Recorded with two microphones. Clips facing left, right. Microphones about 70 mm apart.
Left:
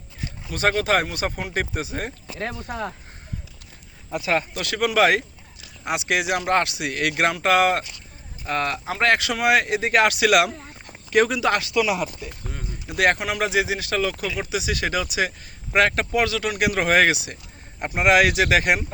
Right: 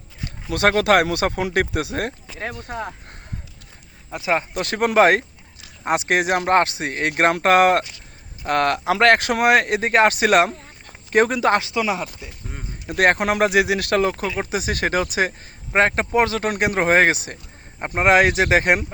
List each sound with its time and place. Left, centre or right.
0.5 s speech: right
4.1 s speech: right
4.5 s speech: right
8.4 s speech: right
9.1 s speech: right
9.9 s speech: right; by 12.6 s centre
12.9 s speech: right
14.3 s speech: right